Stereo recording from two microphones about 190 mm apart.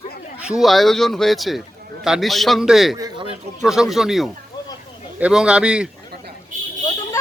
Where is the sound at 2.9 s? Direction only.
20° right (ahead or behind).